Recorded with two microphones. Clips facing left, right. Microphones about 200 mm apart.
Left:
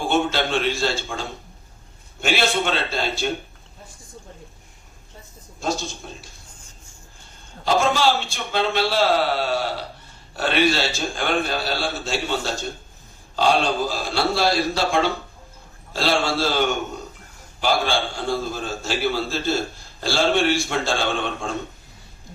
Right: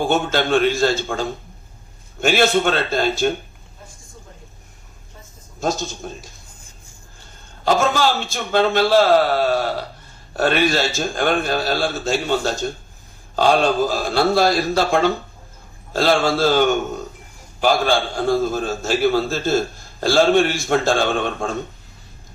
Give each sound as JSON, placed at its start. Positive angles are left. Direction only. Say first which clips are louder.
{"t": 0.0, "sound": "a man's voice", "louder": "right 2 dB", "side_deg": -45}
{"t": 5.5, "sound": "a man's voice", "louder": "right 3 dB", "side_deg": -45}
{"t": 7.6, "sound": "a man's voice", "louder": "right 2 dB", "side_deg": -45}